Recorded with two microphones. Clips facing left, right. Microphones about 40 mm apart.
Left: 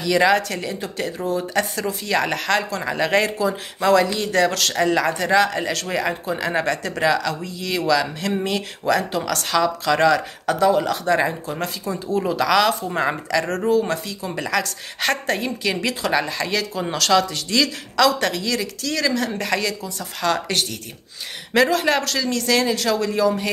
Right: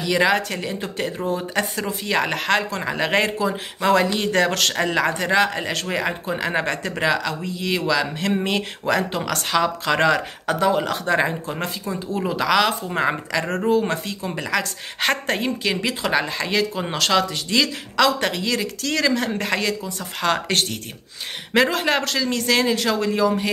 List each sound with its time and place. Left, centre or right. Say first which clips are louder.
0.0 s speech: left 2 dB; centre
4.1 s speech: even; right
4.7 s speech: left 2 dB; right
14.3 s speech: left 1 dB; centre
14.6 s speech: even; right
15.7 s speech: left 2 dB; centre
18.8 s speech: right 2 dB; right
21.5 s speech: left 1 dB; right